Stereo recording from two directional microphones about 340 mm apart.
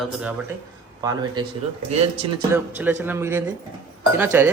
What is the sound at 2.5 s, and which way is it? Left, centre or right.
Speech, centre.